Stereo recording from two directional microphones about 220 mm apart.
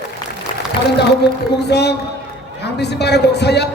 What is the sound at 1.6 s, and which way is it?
A man's voice, 50° left (ahead or behind).